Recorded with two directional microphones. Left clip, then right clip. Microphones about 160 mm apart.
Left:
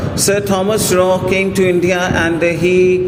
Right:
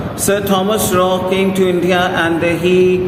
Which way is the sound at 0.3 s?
35° left (ahead or behind).